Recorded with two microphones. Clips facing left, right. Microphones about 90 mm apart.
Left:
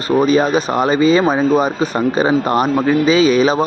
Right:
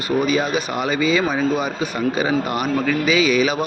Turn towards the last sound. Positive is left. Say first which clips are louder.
# left 5 dB
turn(degrees=35)  # may be behind; listen again after turning